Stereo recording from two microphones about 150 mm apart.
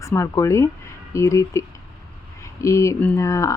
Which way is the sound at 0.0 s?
20° left (ahead or behind).